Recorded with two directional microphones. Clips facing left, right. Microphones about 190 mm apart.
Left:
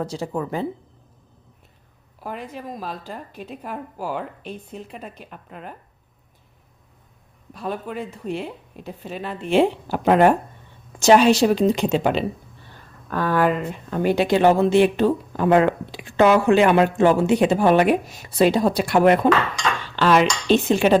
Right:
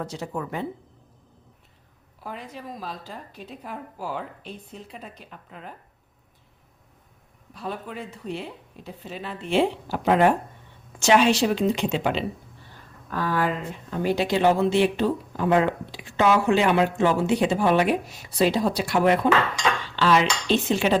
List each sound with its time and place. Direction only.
0.0 s a woman's voice: 30° left (ahead or behind)
2.2 s speech: 55° left (ahead or behind)
7.5 s a woman's voice: 50° left (ahead or behind)
13.1 s speech: 55° left (ahead or behind)